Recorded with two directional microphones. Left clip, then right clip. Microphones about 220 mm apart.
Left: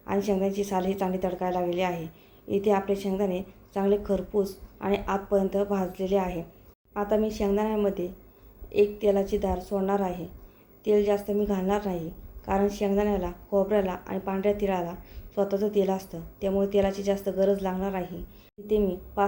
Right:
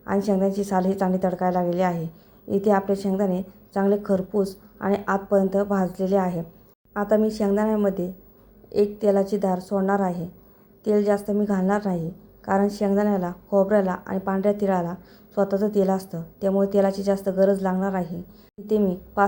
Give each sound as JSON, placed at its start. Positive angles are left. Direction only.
{"t": 0.0, "sound": "a woman's voice", "side_deg": -20}